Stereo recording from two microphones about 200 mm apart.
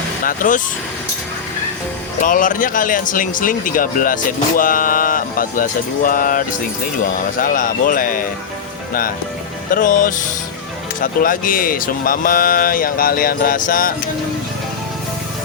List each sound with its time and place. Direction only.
0.3 s speech: 40° left (ahead or behind)
2.2 s speech: 40° left (ahead or behind)